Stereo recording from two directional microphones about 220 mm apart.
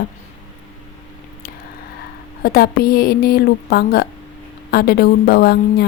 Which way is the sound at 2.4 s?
45° left (ahead or behind).